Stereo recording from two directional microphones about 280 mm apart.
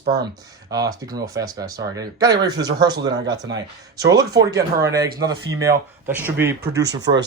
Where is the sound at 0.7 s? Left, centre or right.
Centre.